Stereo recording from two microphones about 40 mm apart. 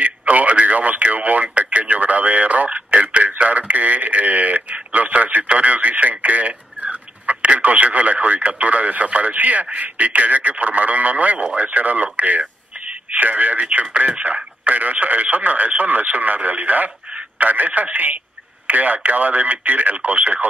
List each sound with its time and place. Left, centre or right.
0.0 s radio: right
3.4 s speech: right
14.2 s speech: right